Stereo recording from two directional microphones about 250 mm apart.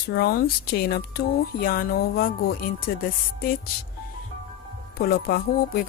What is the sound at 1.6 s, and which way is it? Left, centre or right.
Speech, left.